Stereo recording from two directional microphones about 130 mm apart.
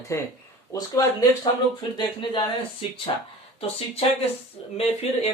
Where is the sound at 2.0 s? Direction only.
40° left (ahead or behind).